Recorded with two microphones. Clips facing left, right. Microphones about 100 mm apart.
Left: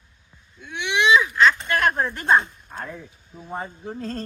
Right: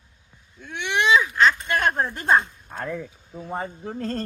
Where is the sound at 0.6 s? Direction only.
45° right (ahead or behind).